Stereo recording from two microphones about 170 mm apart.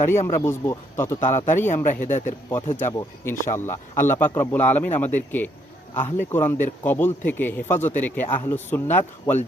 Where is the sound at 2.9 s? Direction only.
15° left (ahead or behind).